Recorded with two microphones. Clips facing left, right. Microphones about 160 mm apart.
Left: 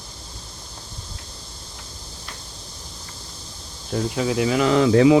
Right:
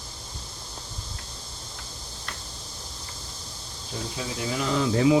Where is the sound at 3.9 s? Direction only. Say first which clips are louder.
Left 11 dB; 85° left.